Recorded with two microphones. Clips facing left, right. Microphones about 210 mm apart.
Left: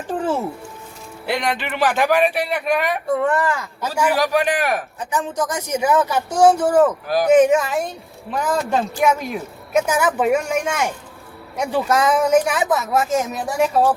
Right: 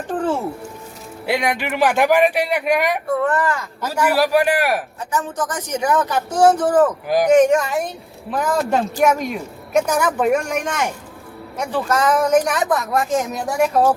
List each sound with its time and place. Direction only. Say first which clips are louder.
0.1 s music: right 1 dB; 10° left (ahead or behind)
1.3 s speech: right 2 dB; 10° right (ahead or behind)
3.2 s speech: even; 10° left (ahead or behind)
4.0 s speech: right 2 dB; 10° right (ahead or behind)
5.1 s speech: left 1 dB; 10° left (ahead or behind)